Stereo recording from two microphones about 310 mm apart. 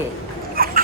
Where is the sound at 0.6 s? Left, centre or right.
Right.